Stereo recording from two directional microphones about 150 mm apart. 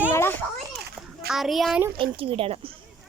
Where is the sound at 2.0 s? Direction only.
40° right (ahead or behind).